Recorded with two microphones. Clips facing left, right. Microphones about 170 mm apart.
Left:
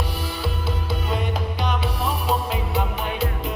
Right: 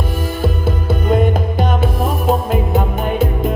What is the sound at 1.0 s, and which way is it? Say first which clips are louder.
Music: right 12 dB; 50° right (ahead or behind).